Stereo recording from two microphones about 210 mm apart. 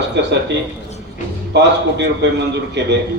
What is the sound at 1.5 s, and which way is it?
A man's voice, 55° right (ahead or behind).